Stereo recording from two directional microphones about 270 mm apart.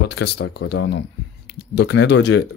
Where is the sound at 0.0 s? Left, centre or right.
Left.